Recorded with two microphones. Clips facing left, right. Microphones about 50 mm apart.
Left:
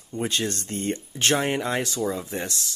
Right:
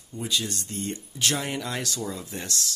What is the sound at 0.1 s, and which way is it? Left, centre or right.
Speech, left.